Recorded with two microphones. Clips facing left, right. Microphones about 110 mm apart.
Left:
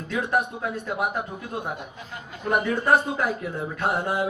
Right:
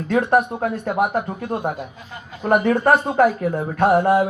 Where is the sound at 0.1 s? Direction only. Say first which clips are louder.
Right 8 dB; 55° right (ahead or behind).